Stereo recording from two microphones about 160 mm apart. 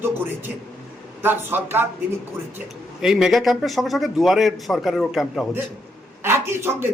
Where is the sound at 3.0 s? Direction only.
Centre (ahead or behind).